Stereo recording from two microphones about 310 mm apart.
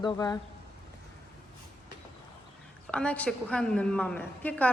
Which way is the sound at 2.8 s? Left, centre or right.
Centre.